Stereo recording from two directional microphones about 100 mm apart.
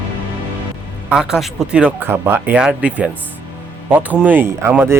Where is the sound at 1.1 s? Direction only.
5° right (ahead or behind).